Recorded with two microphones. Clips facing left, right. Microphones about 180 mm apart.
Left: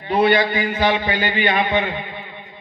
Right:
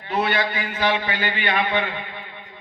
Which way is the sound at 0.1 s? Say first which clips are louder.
Left 7 dB; 30° left (ahead or behind).